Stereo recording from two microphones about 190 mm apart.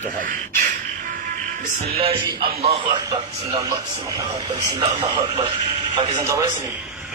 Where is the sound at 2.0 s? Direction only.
25° right (ahead or behind).